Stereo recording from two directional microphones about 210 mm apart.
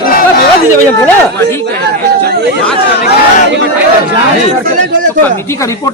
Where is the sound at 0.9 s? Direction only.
10° left (ahead or behind).